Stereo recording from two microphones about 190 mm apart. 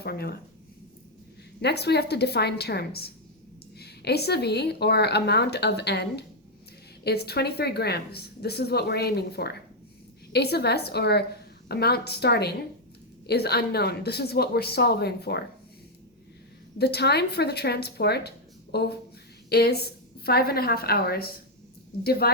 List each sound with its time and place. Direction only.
0.0 s a woman's voice: 55° left (ahead or behind)
1.6 s a woman's voice: 60° left (ahead or behind)
16.7 s a woman's voice: 60° left (ahead or behind)